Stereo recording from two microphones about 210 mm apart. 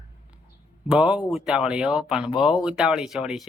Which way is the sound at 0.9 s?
5° right (ahead or behind).